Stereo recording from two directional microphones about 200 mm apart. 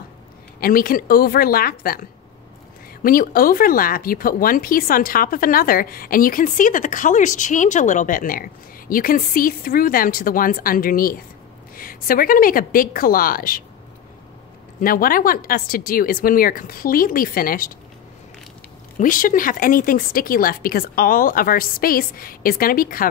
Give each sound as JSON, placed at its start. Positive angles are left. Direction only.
{"t": 0.6, "sound": "speech", "side_deg": 45}
{"t": 14.8, "sound": "speech", "side_deg": 45}
{"t": 18.9, "sound": "speech", "side_deg": 45}